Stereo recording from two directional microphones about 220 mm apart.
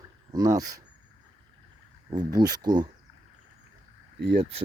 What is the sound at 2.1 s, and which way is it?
Speech, 20° right (ahead or behind).